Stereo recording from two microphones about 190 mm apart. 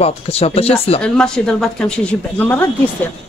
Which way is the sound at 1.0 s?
5° left (ahead or behind).